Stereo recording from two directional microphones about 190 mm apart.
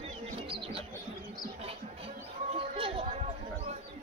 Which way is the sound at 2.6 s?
30° right (ahead or behind).